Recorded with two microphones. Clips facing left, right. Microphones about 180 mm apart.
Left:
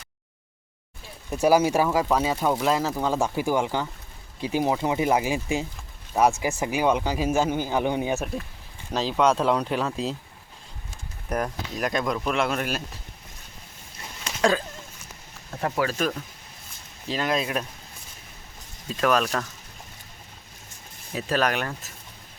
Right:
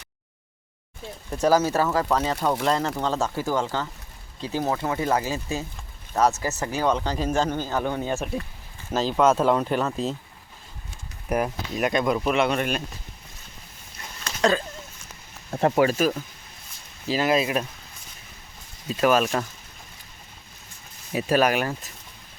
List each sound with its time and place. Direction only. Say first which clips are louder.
1.3 s speech: left 1 dB; 10° left (ahead or behind)
8.1 s speech: even; centre (ahead or behind)
11.3 s speech: right 3 dB; 5° right (ahead or behind)
14.3 s a sound: even; 10° left (ahead or behind)
15.6 s speech: right 6 dB; 25° right (ahead or behind)
15.9 s speech: right 4 dB; 5° right (ahead or behind)
18.9 s speech: right 2 dB; 5° right (ahead or behind)
21.1 s speech: right 4 dB; 10° right (ahead or behind)